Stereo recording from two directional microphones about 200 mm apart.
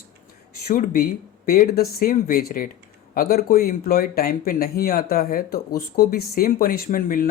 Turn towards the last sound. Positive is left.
turn(degrees=45)  # may be behind; listen again after turning